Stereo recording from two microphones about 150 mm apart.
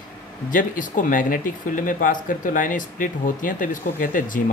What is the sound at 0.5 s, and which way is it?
Speech, 60° left (ahead or behind).